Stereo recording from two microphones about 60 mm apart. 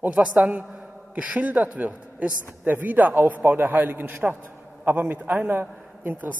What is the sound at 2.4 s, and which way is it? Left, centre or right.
A woman's voice, right.